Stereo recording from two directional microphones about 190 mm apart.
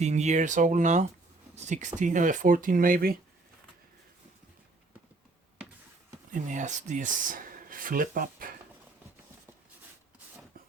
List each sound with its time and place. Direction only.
0.0 s speech: 35° right (ahead or behind)
6.3 s speech: 40° right (ahead or behind)